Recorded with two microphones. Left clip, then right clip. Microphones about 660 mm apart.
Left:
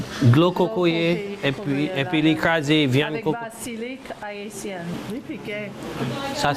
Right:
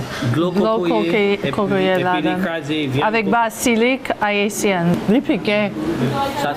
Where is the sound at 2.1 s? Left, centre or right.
Left.